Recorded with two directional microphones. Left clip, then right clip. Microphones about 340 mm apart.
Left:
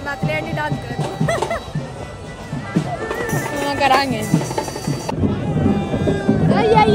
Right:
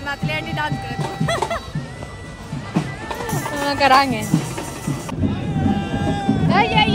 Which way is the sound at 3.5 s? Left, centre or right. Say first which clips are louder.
Right 2 dB; right.